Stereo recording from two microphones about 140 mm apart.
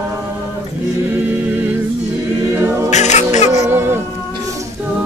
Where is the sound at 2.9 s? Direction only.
55° left (ahead or behind).